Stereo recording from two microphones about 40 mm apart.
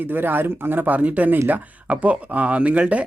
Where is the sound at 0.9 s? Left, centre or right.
Right.